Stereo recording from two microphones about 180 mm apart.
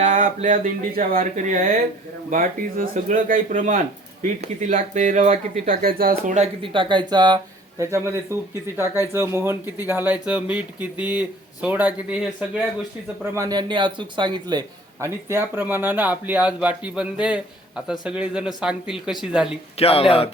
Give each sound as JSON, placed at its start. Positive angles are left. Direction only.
{"t": 0.0, "sound": "speech", "side_deg": -40}
{"t": 13.2, "sound": "a man's voice", "side_deg": -15}
{"t": 15.0, "sound": "speech", "side_deg": -15}
{"t": 19.7, "sound": "speech", "side_deg": 35}